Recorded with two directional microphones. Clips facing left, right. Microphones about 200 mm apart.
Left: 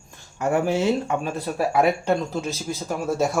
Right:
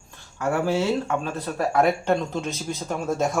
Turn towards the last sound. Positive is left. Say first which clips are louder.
# left 1 dB
turn(degrees=5)  # may be behind; listen again after turning